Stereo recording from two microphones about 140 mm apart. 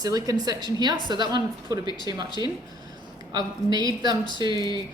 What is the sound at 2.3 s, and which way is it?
Speech, 30° left (ahead or behind).